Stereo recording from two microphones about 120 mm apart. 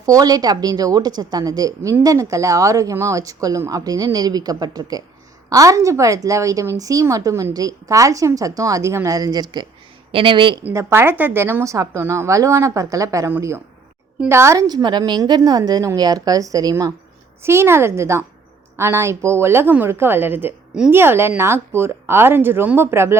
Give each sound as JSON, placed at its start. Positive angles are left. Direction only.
{"t": 0.0, "sound": "a woman's voice", "side_deg": -30}
{"t": 10.1, "sound": "speech", "side_deg": -50}
{"t": 10.7, "sound": "a woman's voice", "side_deg": -20}